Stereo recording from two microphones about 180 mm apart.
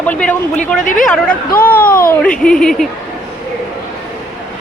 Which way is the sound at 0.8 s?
45° left (ahead or behind).